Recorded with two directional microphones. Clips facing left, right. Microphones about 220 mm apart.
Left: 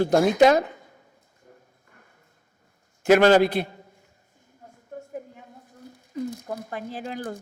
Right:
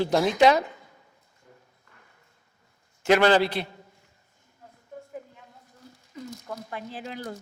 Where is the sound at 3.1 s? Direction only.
45° left (ahead or behind).